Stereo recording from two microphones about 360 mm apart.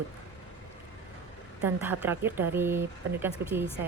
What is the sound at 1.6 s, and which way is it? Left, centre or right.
Speech, centre.